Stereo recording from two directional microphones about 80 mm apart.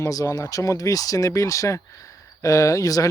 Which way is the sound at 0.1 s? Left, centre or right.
Left.